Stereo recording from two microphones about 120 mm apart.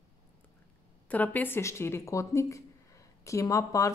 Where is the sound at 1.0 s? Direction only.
15° left (ahead or behind).